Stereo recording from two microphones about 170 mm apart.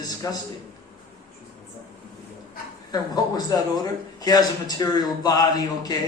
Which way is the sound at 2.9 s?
20° left (ahead or behind).